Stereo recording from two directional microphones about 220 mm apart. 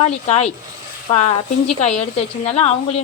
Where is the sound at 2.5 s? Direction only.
30° left (ahead or behind).